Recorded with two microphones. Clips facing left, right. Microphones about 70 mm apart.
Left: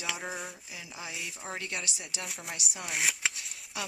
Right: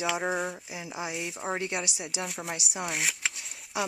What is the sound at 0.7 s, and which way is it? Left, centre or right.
Speech, centre.